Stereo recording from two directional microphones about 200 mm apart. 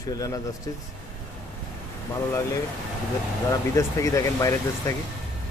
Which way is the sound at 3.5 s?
15° left (ahead or behind).